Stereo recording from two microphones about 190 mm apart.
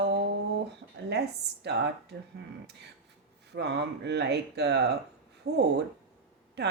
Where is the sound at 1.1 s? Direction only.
60° right (ahead or behind).